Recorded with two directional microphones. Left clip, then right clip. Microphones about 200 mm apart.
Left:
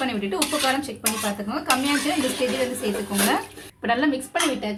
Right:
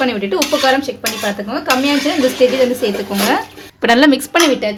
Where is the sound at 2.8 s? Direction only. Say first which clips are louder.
Right 8 dB; 35° right (ahead or behind).